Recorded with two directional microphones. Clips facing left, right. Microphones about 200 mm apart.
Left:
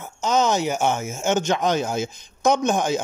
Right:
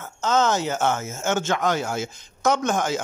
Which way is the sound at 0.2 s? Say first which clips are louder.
Left 1 dB; 15° left (ahead or behind).